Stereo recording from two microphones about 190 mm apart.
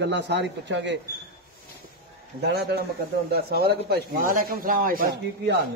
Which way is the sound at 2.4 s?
60° right (ahead or behind).